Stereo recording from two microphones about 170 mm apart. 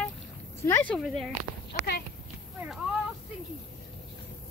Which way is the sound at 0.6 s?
10° left (ahead or behind).